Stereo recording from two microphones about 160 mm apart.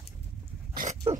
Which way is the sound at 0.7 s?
55° right (ahead or behind).